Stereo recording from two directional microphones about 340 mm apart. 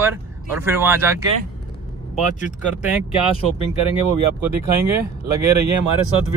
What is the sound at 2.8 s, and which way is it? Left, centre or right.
Speech, centre.